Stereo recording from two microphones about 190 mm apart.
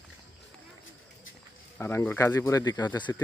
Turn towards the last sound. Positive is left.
turn(degrees=15)  # may be behind; listen again after turning